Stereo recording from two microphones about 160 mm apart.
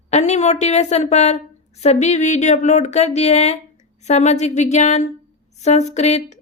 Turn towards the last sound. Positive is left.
turn(degrees=45)  # may be behind; listen again after turning